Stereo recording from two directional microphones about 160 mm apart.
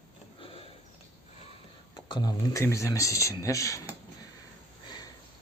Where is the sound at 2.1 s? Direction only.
20° left (ahead or behind).